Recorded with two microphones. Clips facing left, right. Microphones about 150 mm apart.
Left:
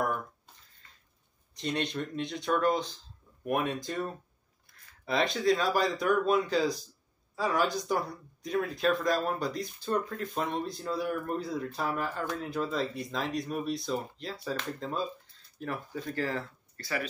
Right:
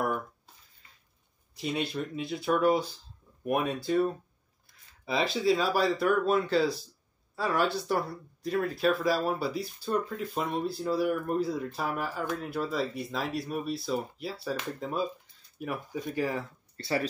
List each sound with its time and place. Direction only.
1.5 s speech: 5° right (ahead or behind)
16.7 s speech: 25° right (ahead or behind)